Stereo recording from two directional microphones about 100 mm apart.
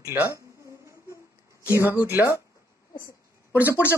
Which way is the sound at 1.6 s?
30° left (ahead or behind).